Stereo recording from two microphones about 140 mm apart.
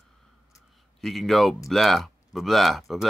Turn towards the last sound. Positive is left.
turn(degrees=0)  # may be behind; listen again after turning